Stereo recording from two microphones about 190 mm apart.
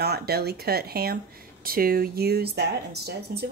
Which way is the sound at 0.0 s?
55° right (ahead or behind).